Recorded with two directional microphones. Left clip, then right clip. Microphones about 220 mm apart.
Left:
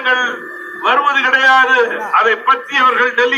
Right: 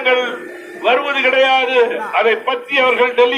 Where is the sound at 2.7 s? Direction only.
55° left (ahead or behind).